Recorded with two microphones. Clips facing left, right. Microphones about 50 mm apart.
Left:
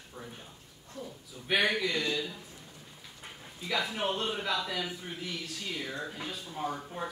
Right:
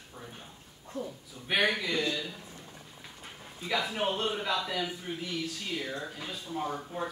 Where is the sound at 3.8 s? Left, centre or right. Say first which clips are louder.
Right 1 dB; centre.